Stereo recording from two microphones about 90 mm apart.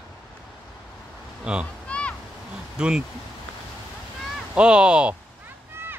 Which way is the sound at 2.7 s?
10° right (ahead or behind).